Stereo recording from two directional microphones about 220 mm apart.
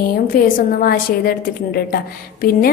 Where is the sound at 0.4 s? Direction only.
40° left (ahead or behind).